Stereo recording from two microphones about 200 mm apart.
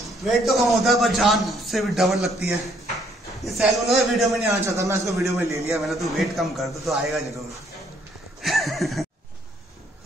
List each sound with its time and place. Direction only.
0.0 s a man's voice: centre (ahead or behind)
3.4 s a man's voice: centre (ahead or behind)
4.5 s a man's voice: 15° right (ahead or behind)
5.7 s a man's voice: centre (ahead or behind)
8.4 s horse: centre (ahead or behind)